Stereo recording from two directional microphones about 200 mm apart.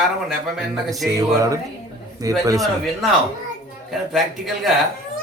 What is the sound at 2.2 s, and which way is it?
Speech, 15° right (ahead or behind).